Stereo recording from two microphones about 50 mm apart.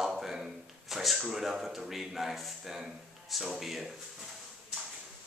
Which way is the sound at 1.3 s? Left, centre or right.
Centre.